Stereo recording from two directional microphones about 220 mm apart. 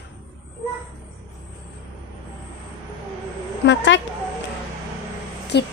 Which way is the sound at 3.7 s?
55° left (ahead or behind).